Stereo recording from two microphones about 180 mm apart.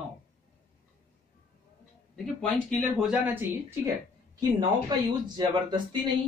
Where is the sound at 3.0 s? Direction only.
5° right (ahead or behind).